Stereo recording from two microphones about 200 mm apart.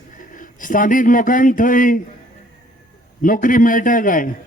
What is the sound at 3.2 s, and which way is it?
Speech, 45° left (ahead or behind).